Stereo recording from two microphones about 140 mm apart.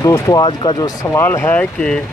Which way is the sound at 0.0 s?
25° left (ahead or behind).